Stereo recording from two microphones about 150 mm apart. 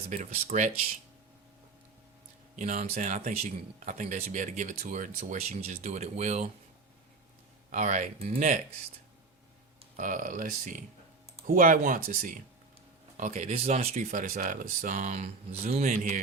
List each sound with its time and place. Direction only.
0.1 s speech: 50° right (ahead or behind)
2.6 s speech: 50° right (ahead or behind)
7.7 s speech: 55° right (ahead or behind)
10.0 s speech: 60° right (ahead or behind)